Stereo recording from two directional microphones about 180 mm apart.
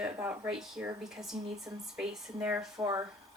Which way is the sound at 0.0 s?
10° right (ahead or behind).